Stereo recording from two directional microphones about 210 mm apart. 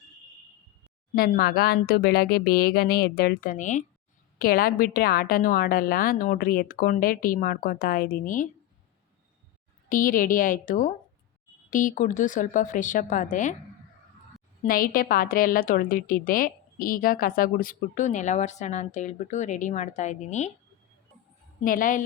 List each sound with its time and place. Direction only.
1.1 s a woman's voice: 45° left (ahead or behind)
9.9 s a woman's voice: 40° left (ahead or behind)
14.7 s a woman's voice: 40° left (ahead or behind)
21.6 s a woman's voice: 40° left (ahead or behind)